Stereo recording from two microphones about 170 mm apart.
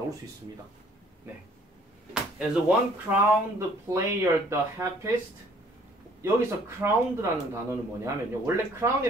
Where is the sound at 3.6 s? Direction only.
15° right (ahead or behind).